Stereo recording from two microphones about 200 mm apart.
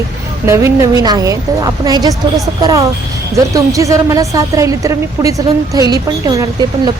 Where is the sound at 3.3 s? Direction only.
15° right (ahead or behind).